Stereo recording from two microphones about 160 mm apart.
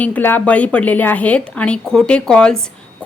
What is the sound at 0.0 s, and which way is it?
A woman's voice, 10° left (ahead or behind).